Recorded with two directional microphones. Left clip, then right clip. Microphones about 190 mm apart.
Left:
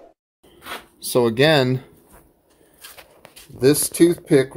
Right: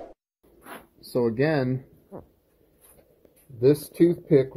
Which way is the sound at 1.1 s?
20° left (ahead or behind).